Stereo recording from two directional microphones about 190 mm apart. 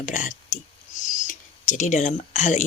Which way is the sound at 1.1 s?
40° left (ahead or behind).